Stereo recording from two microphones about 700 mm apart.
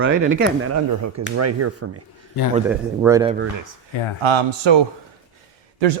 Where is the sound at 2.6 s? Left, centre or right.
Centre.